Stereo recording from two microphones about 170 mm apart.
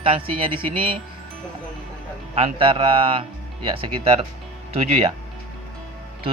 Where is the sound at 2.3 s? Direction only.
35° right (ahead or behind).